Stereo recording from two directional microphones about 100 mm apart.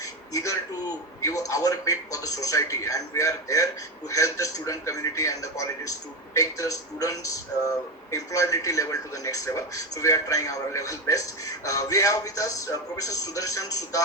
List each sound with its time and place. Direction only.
0.3 s speech: 35° left (ahead or behind)